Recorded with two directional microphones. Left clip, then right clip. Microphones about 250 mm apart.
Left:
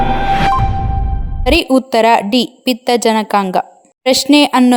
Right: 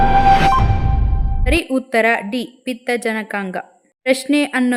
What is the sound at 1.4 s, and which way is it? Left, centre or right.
A woman's voice, centre.